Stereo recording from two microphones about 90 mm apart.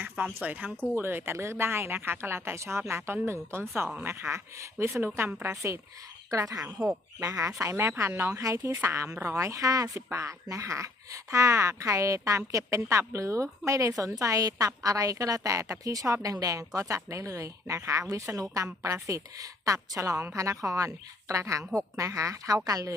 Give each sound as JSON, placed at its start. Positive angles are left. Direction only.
{"t": 0.4, "sound": "a woman's voice", "side_deg": -15}